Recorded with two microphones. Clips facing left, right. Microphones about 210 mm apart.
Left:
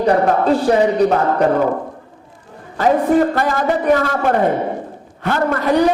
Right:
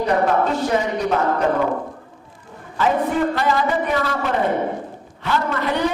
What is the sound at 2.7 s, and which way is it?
A man's voice, 40° left (ahead or behind).